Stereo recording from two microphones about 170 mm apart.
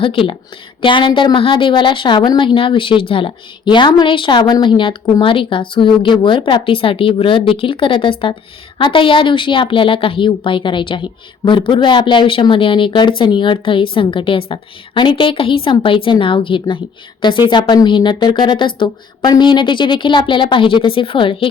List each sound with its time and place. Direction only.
0.0 s a woman's voice: 30° left (ahead or behind)